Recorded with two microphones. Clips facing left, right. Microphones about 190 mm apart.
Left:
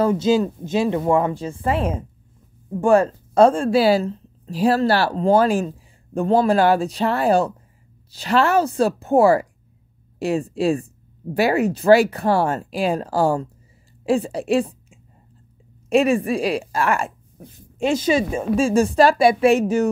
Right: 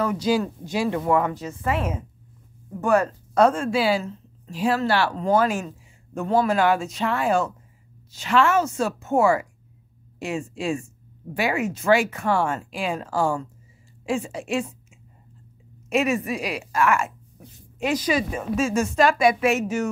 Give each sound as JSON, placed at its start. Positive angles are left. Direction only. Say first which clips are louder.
{"t": 0.0, "sound": "a woman's voice", "louder": "left 5 dB", "side_deg": 25}